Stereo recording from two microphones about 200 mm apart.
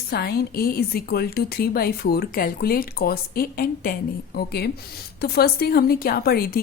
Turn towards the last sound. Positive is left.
turn(degrees=50)  # may be behind; listen again after turning